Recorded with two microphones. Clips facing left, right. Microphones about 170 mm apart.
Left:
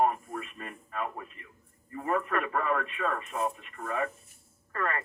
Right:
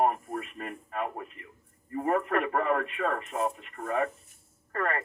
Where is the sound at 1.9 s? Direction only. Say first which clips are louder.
Right 3 dB; 45° right (ahead or behind).